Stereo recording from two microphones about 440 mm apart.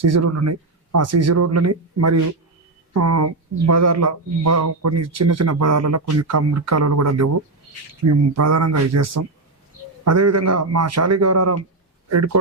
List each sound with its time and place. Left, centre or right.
0.0 s speech: right